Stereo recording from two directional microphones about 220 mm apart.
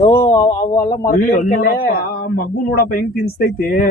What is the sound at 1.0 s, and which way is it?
A man's voice, 40° left (ahead or behind).